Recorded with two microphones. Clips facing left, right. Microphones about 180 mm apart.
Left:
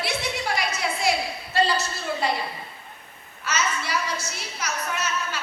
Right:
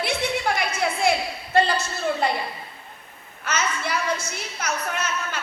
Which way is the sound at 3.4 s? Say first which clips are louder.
Right 1 dB; 55° right (ahead or behind).